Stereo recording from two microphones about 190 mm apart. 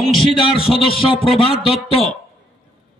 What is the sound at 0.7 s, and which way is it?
A man's voice, 30° left (ahead or behind).